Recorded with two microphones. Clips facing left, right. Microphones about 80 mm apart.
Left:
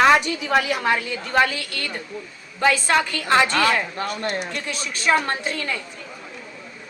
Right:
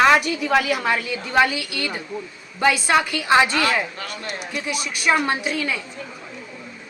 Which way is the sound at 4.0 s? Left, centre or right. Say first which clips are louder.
Left 6 dB; left.